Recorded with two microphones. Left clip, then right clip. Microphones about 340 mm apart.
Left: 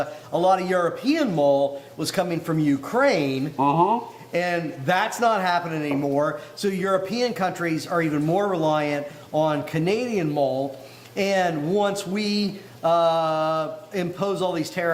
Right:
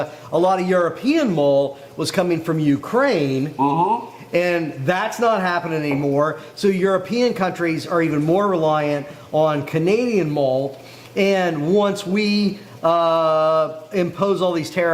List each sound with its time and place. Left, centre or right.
0.0 s a man's voice: right
3.6 s speech: left
4.3 s a man's voice: right